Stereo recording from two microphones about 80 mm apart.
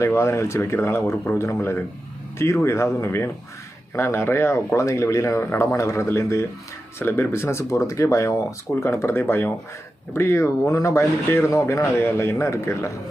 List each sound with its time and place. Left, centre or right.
0.0 s speech: left
2.4 s speech: left